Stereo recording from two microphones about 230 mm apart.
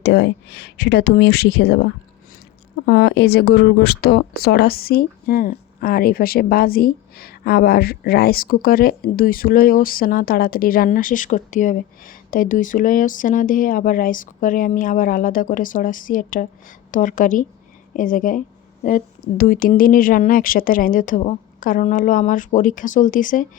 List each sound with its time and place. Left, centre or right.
0.0 s speech: left